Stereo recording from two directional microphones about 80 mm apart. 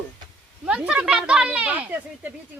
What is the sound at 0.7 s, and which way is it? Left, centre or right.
Speech, centre.